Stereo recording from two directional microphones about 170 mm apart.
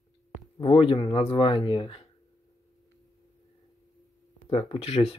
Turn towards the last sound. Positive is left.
turn(degrees=35)  # may be behind; listen again after turning